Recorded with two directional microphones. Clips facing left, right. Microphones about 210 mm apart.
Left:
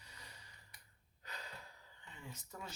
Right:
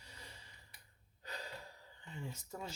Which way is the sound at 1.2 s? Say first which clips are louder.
Right 5 dB; 30° right (ahead or behind).